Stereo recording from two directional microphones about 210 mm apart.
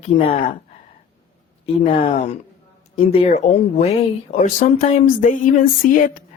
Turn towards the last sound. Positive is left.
turn(degrees=40)  # may be behind; listen again after turning